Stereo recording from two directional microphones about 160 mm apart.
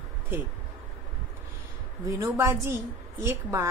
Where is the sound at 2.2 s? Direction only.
20° right (ahead or behind).